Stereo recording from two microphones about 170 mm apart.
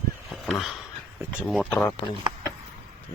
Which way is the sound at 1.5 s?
5° left (ahead or behind).